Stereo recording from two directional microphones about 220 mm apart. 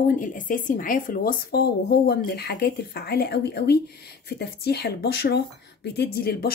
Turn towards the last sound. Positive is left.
turn(degrees=45)  # may be behind; listen again after turning